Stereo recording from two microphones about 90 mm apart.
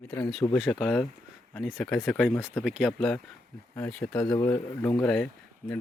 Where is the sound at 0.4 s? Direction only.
50° left (ahead or behind).